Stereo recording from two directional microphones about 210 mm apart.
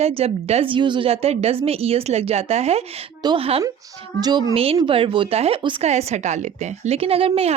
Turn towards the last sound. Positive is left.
turn(degrees=-30)  # may be behind; listen again after turning